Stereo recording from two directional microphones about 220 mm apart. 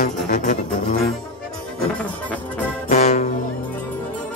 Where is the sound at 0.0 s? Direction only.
35° left (ahead or behind).